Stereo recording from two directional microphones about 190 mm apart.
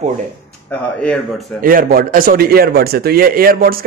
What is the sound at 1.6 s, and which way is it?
A man's voice, 50° right (ahead or behind).